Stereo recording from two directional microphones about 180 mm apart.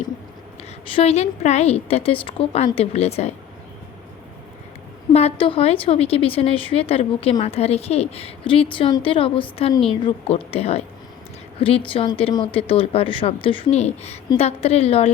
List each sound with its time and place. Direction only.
0.9 s speech: 35° left (ahead or behind)
5.1 s speech: 30° left (ahead or behind)